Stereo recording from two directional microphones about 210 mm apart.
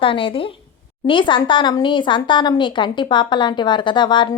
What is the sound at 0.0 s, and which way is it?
A woman's voice, 25° left (ahead or behind).